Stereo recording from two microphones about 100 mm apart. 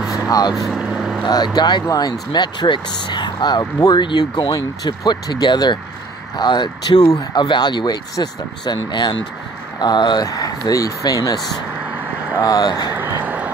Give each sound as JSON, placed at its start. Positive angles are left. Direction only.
{"t": 0.3, "sound": "speech", "side_deg": 40}
{"t": 0.6, "sound": "vehicle", "side_deg": -5}
{"t": 1.2, "sound": "speech", "side_deg": 45}
{"t": 12.9, "sound": "a sound", "side_deg": -20}